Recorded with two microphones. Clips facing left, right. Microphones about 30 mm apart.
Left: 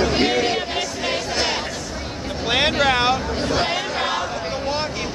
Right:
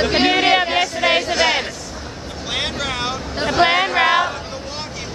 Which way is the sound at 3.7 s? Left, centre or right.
Right.